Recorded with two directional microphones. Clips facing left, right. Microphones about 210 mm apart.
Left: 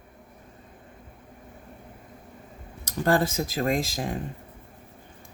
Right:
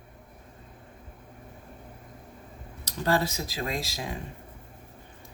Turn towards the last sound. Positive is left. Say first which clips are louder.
# left 7 dB
turn(degrees=50)  # may be behind; listen again after turning